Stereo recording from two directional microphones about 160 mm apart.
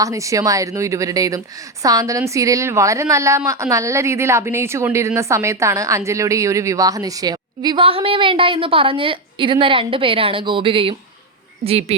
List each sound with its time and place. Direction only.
0.0 s a woman's voice: 20° right (ahead or behind); by 11.9 s 40° right (ahead or behind)